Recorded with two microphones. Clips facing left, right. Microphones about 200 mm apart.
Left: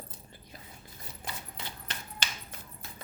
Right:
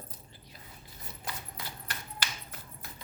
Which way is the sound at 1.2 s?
25° left (ahead or behind).